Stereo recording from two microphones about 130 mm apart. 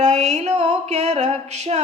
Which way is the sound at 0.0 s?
60° right (ahead or behind).